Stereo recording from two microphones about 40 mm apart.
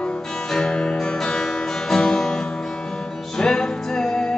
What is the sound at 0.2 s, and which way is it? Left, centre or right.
Music, centre.